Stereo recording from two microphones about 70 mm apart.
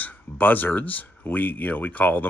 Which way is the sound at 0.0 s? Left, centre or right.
Left.